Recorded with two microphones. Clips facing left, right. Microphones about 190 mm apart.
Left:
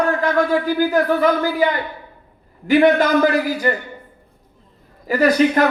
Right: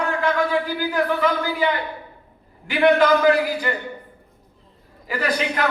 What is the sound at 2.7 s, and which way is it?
A man's voice, 45° left (ahead or behind).